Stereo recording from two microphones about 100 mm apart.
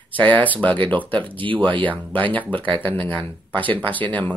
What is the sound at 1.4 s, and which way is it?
Speech, 55° right (ahead or behind).